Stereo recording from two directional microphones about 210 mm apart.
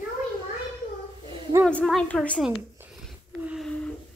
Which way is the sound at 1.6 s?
5° left (ahead or behind).